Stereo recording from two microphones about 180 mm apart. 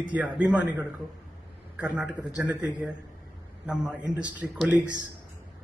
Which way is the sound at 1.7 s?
5° right (ahead or behind).